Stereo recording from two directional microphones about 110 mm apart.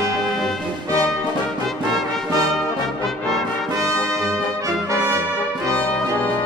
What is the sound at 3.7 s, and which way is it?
Brass instrument, 30° right (ahead or behind).